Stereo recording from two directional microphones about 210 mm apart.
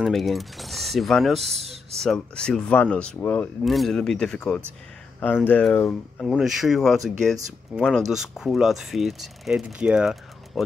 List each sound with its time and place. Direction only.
0.0 s speech: centre (ahead or behind)
1.5 s a sound: 30° right (ahead or behind)
2.0 s speech: 5° left (ahead or behind)